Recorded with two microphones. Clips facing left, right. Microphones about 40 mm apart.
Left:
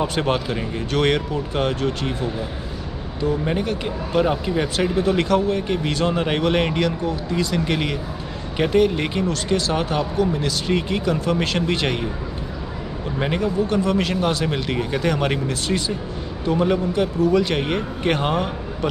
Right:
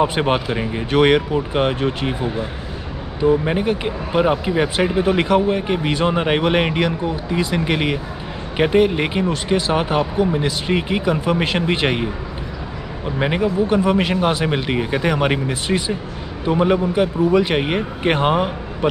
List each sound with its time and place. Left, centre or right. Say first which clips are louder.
0.0 s speech: right 4 dB; right
13.2 s speech: right 3 dB; centre